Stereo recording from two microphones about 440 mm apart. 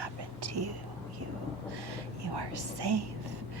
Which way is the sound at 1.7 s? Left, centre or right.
Right.